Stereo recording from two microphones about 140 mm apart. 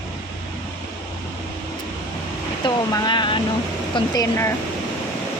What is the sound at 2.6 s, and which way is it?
Speech, 30° left (ahead or behind).